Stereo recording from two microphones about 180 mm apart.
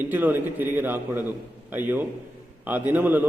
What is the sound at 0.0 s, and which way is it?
A man's voice, 10° right (ahead or behind).